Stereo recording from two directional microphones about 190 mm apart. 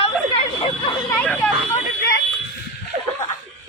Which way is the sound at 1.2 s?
5° left (ahead or behind).